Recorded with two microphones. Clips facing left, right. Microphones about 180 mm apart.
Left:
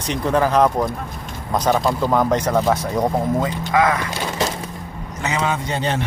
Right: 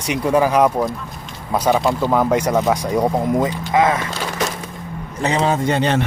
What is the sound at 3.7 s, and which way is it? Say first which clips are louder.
Speech: right 1 dB; 25° right (ahead or behind).